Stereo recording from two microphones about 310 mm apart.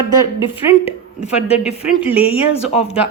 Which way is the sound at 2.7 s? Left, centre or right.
Centre.